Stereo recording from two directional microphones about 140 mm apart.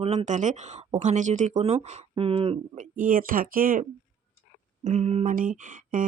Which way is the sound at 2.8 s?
75° right (ahead or behind).